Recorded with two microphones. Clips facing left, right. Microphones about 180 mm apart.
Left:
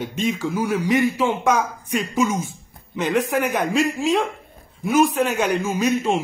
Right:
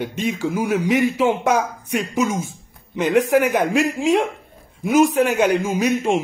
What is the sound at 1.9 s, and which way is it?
Speech, 70° right (ahead or behind).